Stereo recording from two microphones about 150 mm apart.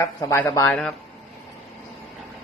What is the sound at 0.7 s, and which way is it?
Speech, 5° left (ahead or behind).